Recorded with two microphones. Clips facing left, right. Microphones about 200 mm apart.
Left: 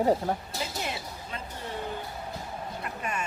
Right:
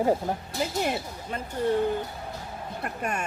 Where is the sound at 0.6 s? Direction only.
50° right (ahead or behind).